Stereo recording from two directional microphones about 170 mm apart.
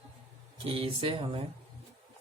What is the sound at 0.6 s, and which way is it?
Speech, 30° right (ahead or behind).